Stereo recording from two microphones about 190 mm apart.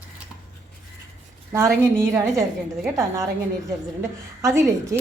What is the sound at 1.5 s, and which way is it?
Speech, 15° right (ahead or behind).